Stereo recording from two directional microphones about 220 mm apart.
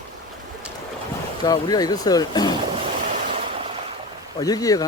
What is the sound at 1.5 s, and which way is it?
Speech, 15° left (ahead or behind).